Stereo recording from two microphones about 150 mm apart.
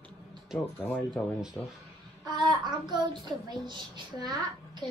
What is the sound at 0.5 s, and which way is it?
Speech, 5° right (ahead or behind).